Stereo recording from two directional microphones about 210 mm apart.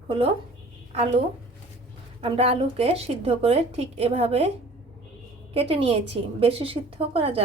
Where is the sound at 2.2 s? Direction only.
25° right (ahead or behind).